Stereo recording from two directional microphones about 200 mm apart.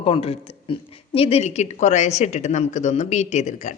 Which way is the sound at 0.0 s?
30° left (ahead or behind).